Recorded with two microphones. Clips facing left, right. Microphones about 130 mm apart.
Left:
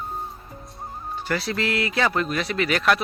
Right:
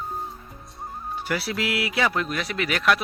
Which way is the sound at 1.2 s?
10° right (ahead or behind).